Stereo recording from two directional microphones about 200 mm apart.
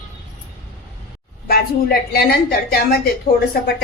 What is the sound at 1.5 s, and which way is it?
A woman's voice, 50° left (ahead or behind).